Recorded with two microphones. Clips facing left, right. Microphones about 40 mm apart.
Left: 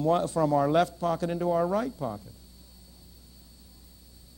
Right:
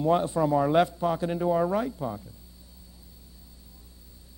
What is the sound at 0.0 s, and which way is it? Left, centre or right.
Speech, centre.